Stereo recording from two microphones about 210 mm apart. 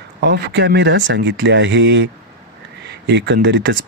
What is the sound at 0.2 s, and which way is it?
Speech, 55° right (ahead or behind).